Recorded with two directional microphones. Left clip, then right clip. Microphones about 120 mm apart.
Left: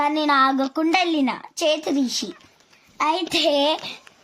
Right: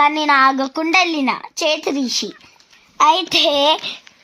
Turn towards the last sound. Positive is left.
turn(degrees=-35)  # may be behind; listen again after turning